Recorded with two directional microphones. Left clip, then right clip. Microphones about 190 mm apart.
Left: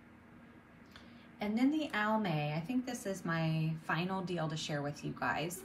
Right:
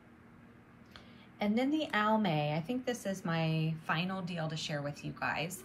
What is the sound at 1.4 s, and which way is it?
A woman's voice, centre (ahead or behind).